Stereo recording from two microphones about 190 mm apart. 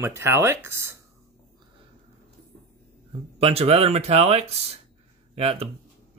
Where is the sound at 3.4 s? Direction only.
30° right (ahead or behind).